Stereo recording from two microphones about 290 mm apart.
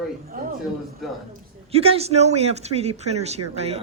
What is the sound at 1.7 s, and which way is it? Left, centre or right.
Speech, centre.